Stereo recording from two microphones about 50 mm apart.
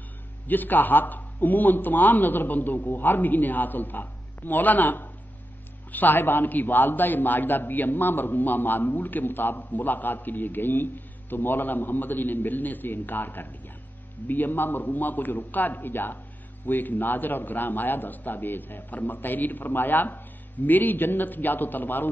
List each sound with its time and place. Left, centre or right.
0.5 s a man's voice: left